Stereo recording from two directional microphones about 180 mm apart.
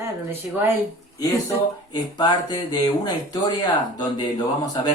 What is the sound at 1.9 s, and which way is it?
Speech, 25° left (ahead or behind).